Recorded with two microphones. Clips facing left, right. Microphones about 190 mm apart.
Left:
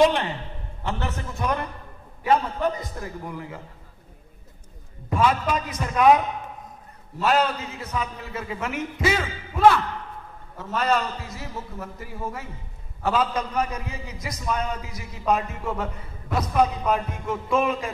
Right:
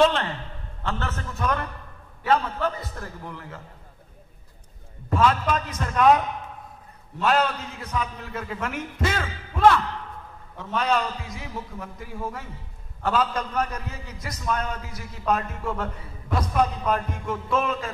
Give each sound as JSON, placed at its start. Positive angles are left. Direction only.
{"t": 0.0, "sound": "a sound", "side_deg": 15}
{"t": 0.8, "sound": "a man's voice", "side_deg": 15}
{"t": 5.1, "sound": "a man's voice", "side_deg": 10}